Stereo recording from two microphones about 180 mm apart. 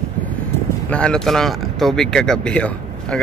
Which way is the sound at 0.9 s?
5° left (ahead or behind).